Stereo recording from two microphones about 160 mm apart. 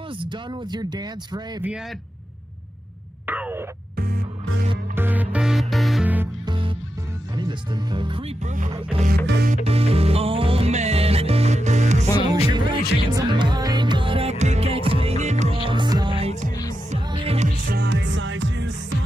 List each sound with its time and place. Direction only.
0.2 s speech: 25° right (ahead or behind)
3.3 s a sound: 10° right (ahead or behind)
3.9 s music: 75° right (ahead or behind)
4.9 s music: 10° right (ahead or behind)
6.4 s music: 30° right (ahead or behind)
7.3 s speech: 30° right (ahead or behind)
8.5 s speech: 50° right (ahead or behind)
9.0 s music: 75° right (ahead or behind)
9.5 s music: 40° right (ahead or behind)
12.3 s music: 25° right (ahead or behind)
17.6 s music: 85° right